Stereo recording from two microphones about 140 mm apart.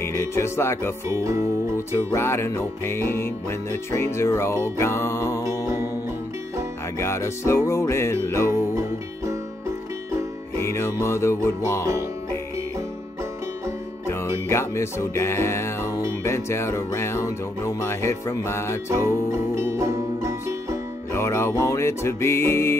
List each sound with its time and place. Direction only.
0.0 s speech: 20° left (ahead or behind)
1.1 s music: 20° right (ahead or behind)
1.9 s music: 20° left (ahead or behind)
7.0 s music: 20° left (ahead or behind)
8.5 s music: 20° right (ahead or behind)
10.6 s music: 20° left (ahead or behind)
14.0 s music: 20° left (ahead or behind)
18.9 s music: 20° right (ahead or behind)
21.1 s music: 20° left (ahead or behind)